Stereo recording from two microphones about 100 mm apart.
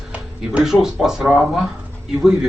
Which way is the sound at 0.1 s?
10° right (ahead or behind).